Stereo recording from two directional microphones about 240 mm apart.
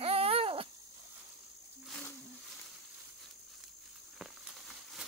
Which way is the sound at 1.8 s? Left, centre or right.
Centre.